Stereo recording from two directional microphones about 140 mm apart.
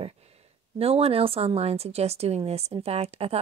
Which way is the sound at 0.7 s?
45° right (ahead or behind).